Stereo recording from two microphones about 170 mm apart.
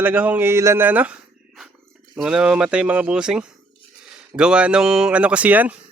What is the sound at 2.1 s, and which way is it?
Speech, 5° right (ahead or behind).